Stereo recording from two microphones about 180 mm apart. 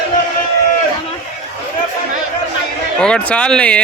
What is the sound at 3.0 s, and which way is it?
Speech, 5° left (ahead or behind).